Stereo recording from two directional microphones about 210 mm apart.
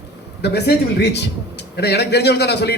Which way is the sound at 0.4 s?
50° left (ahead or behind).